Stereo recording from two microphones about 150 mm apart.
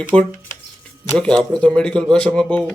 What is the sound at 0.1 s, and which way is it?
Speech, 30° right (ahead or behind).